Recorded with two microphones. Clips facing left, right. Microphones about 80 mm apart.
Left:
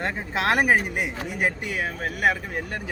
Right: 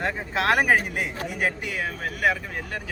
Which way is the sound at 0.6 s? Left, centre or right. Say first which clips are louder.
Left 1 dB; centre.